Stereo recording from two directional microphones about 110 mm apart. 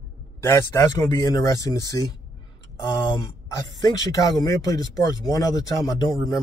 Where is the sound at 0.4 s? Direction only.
30° left (ahead or behind).